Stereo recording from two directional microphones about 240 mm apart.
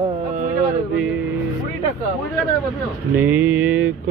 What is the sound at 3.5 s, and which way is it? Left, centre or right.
Mantra, right.